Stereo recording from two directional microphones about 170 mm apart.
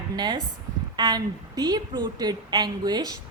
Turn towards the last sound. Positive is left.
turn(degrees=-25)  # may be behind; listen again after turning